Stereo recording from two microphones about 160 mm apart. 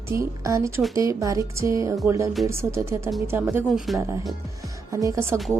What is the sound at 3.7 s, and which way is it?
Speech, centre (ahead or behind).